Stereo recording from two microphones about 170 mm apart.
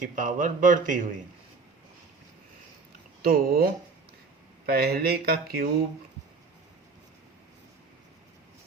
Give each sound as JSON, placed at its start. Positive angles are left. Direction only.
{"t": 0.0, "sound": "speech", "side_deg": -50}
{"t": 3.2, "sound": "speech", "side_deg": -60}